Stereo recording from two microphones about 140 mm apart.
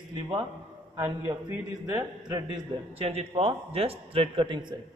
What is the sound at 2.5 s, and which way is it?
A man's voice, 45° right (ahead or behind).